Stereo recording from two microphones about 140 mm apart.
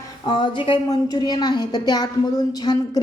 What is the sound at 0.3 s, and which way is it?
A woman's voice, 35° left (ahead or behind).